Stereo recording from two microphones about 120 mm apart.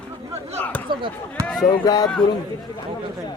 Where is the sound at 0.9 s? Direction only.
40° right (ahead or behind).